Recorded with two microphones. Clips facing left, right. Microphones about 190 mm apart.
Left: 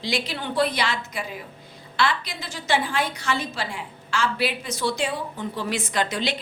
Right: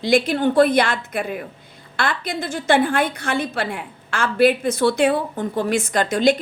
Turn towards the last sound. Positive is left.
turn(degrees=-45)  # may be behind; listen again after turning